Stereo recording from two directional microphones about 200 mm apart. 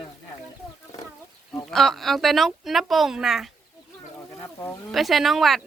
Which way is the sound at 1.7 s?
Centre (ahead or behind).